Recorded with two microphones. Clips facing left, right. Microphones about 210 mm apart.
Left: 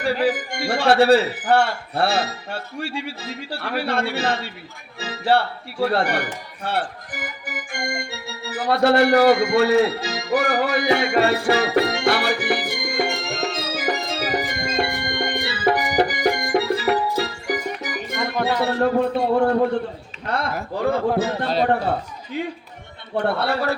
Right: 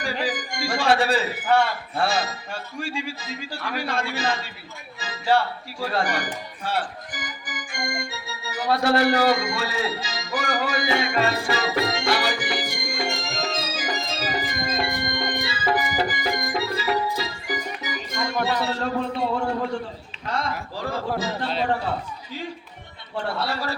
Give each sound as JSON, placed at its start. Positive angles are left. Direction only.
{"t": 0.3, "sound": "a man's voice", "side_deg": 65}
{"t": 4.9, "sound": "music", "side_deg": 65}
{"t": 18.6, "sound": "a man's voice", "side_deg": 55}
{"t": 21.4, "sound": "a man's voice", "side_deg": 40}
{"t": 23.2, "sound": "a man's voice", "side_deg": 60}